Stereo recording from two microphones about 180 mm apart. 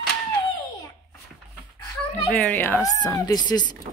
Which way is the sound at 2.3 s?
10° left (ahead or behind).